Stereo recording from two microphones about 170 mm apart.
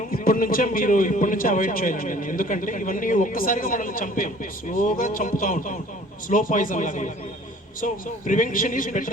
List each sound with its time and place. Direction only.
0.1 s a man's voice: 55° left (ahead or behind)
8.3 s a man's voice: 50° left (ahead or behind)